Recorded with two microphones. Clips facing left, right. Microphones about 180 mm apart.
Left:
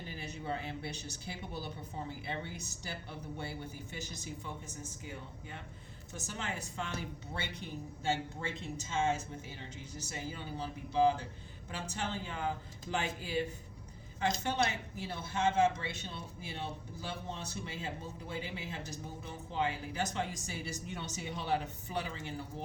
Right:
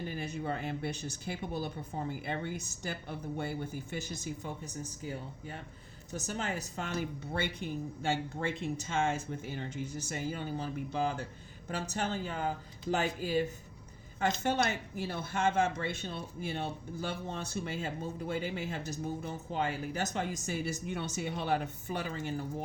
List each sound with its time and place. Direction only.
0.1 s speech: 50° right (ahead or behind)
7.3 s a woman's voice: 55° right (ahead or behind)